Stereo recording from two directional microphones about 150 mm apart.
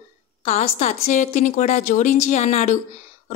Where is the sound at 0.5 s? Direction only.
45° left (ahead or behind).